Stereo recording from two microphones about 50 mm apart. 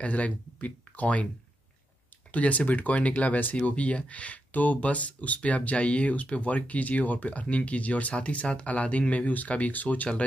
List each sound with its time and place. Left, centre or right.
0.0 s speech: left
2.3 s speech: left